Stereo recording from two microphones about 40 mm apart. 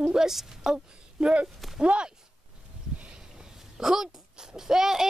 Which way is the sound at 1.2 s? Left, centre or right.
Right.